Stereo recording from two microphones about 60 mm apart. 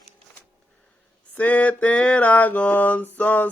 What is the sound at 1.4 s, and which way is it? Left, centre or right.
Mantra, left.